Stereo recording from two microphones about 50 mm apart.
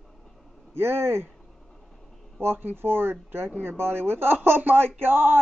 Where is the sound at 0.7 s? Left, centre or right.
Right.